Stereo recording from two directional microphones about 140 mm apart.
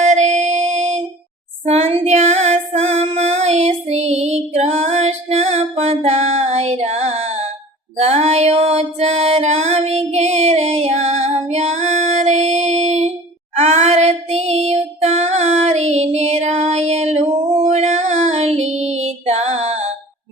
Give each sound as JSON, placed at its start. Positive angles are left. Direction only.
{"t": 0.0, "sound": "music", "side_deg": -55}
{"t": 1.6, "sound": "female singing", "side_deg": -45}
{"t": 13.6, "sound": "child singing", "side_deg": -50}